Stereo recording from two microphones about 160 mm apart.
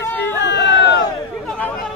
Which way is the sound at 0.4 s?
90° left.